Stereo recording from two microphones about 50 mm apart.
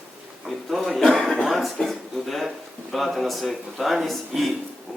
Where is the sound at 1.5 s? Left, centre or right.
Centre.